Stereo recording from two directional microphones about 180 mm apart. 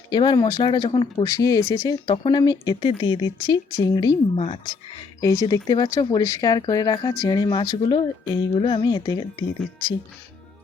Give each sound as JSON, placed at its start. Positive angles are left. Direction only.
{"t": 0.1, "sound": "speech", "side_deg": 25}